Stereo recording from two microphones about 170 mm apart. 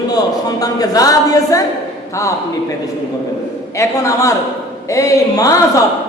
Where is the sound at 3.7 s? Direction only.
20° left (ahead or behind).